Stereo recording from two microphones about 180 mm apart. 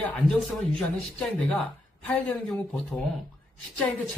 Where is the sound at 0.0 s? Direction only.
5° left (ahead or behind).